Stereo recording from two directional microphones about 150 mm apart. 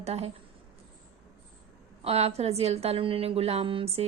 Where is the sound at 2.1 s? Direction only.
45° right (ahead or behind).